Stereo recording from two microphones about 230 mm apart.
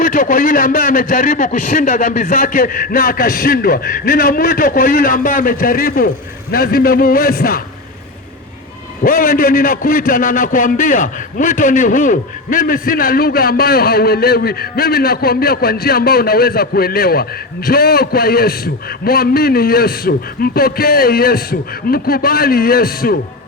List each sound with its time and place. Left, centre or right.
0.0 s a man's voice: left
9.0 s a man's voice: left